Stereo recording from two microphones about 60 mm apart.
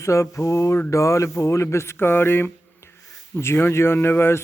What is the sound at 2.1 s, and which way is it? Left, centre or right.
Speech, left.